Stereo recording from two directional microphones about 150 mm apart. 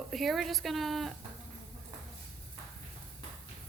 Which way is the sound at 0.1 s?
Centre (ahead or behind).